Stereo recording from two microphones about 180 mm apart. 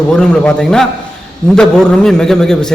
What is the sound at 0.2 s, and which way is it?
A man's voice, 5° left (ahead or behind).